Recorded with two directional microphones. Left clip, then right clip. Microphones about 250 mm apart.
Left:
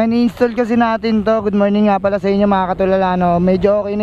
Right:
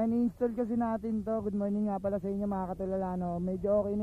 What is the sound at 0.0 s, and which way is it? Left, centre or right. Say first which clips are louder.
Speech: left 16 dB; centre.